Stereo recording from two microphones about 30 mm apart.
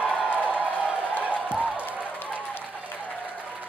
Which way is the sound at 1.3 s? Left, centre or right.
Right.